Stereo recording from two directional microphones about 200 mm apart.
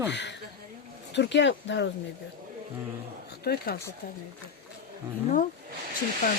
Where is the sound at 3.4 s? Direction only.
50° left (ahead or behind).